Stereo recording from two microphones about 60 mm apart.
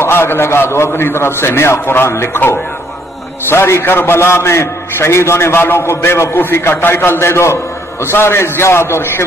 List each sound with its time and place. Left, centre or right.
0.0 s a man's voice: left